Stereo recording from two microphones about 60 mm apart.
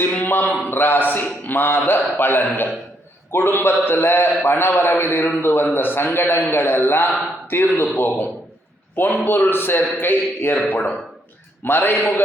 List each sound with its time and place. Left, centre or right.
0.0 s a sound: left
0.7 s a man's voice: left
11.6 s a man's voice: left